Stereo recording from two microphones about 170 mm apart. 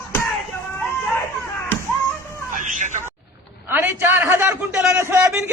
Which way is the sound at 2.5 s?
50° right (ahead or behind).